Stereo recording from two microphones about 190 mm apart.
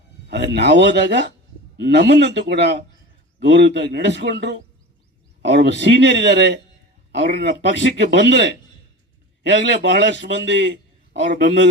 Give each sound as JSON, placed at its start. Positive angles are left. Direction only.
{"t": 0.3, "sound": "a man's voice", "side_deg": -65}
{"t": 9.5, "sound": "a man's voice", "side_deg": -65}